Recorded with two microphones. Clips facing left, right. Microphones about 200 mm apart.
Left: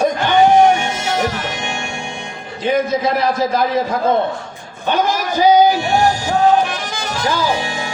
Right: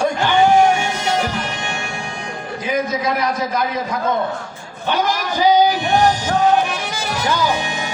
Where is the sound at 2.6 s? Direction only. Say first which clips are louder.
Left 4 dB; 30° left (ahead or behind).